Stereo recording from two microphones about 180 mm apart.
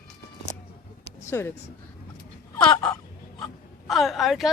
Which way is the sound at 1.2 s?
15° left (ahead or behind).